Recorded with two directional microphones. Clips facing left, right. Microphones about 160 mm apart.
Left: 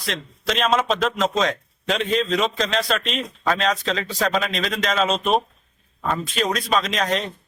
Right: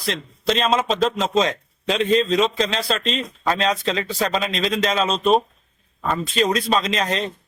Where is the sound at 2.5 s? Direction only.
30° right (ahead or behind).